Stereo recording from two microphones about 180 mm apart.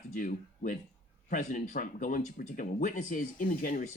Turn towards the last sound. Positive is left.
turn(degrees=50)  # may be behind; listen again after turning